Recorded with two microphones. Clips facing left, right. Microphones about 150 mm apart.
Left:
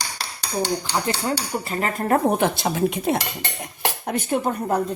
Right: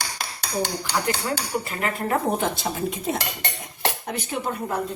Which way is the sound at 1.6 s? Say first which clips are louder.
Left 3 dB; 30° left (ahead or behind).